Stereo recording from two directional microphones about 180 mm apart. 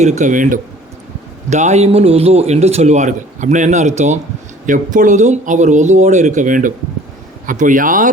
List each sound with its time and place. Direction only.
0.0 s a man's voice: 40° right (ahead or behind)